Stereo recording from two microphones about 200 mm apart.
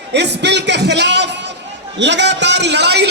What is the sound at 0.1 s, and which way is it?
A man's voice, 60° right (ahead or behind).